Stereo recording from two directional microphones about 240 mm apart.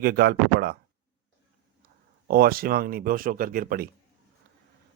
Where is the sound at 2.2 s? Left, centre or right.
Right.